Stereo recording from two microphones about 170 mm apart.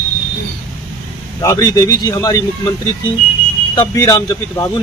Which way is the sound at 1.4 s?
20° left (ahead or behind).